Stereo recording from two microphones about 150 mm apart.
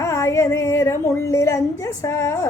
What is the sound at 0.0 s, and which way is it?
A woman's voice, 20° left (ahead or behind).